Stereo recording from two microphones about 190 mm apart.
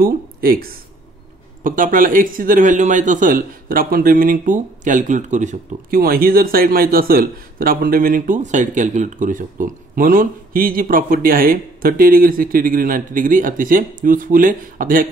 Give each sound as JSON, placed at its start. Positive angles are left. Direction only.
{"t": 0.0, "sound": "speech", "side_deg": -50}